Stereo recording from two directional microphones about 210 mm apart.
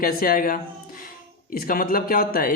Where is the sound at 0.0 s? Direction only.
45° left (ahead or behind).